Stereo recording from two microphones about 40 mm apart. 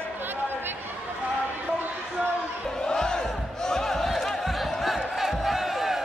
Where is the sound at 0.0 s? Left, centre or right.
Right.